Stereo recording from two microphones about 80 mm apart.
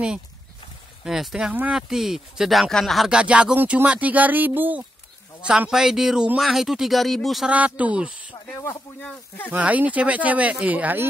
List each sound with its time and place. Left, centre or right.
1.0 s speech: centre
3.1 s speech: centre
5.7 s speech: centre
7.4 s speech: centre
9.5 s speech: centre